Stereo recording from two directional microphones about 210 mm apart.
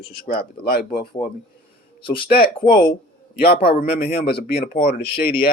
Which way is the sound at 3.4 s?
45° left (ahead or behind).